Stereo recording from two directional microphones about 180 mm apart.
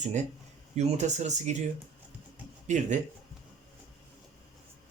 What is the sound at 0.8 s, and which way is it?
Speech, 40° right (ahead or behind).